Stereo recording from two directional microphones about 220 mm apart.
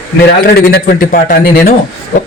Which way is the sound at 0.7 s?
45° left (ahead or behind).